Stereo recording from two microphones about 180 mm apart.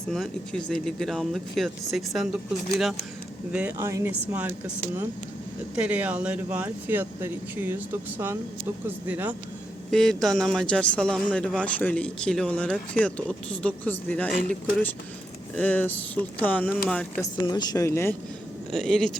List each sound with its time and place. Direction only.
0.1 s speech: 5° left (ahead or behind)
9.9 s speech: centre (ahead or behind)
15.5 s speech: 10° left (ahead or behind)
17.3 s speech: 25° left (ahead or behind)
18.7 s speech: centre (ahead or behind)